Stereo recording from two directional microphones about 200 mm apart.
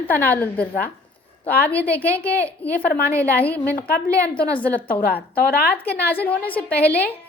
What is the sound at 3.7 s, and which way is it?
Speech, 45° left (ahead or behind).